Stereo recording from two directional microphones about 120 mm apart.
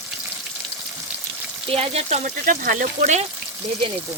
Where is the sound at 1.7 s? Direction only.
60° right (ahead or behind); by 3.2 s 85° right.